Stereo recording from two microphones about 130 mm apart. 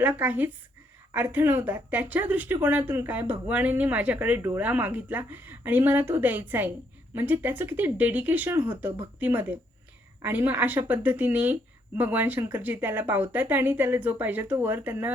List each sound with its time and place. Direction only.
0.0 s speech: 15° right (ahead or behind)